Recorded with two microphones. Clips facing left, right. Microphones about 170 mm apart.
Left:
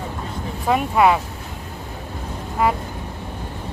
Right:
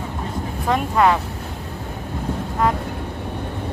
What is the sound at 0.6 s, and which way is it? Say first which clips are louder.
Speech: left 1 dB; 10° left (ahead or behind).